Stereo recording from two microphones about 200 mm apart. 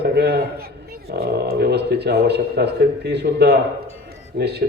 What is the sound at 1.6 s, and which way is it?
A man's voice, 55° right (ahead or behind).